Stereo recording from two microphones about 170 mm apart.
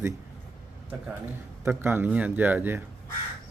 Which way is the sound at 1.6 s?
10° right (ahead or behind).